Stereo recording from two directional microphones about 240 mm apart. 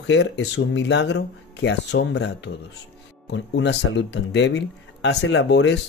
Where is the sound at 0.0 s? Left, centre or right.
Left.